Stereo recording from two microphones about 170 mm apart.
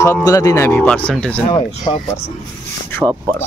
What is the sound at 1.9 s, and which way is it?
Speech, 20° left (ahead or behind).